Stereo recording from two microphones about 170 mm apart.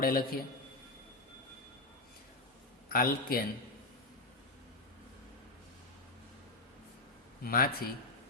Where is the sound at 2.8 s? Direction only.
60° left (ahead or behind).